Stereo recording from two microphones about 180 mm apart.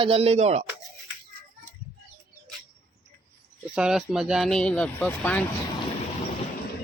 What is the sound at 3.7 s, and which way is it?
Speech, 5° right (ahead or behind).